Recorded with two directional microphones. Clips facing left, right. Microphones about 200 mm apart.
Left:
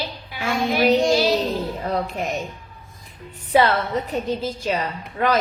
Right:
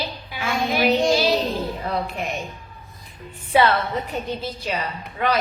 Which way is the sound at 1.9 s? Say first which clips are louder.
Left 2 dB; 40° left (ahead or behind).